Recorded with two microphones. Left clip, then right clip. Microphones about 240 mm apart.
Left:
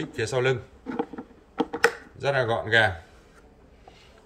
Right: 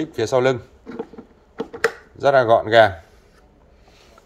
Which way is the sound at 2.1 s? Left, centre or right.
Right.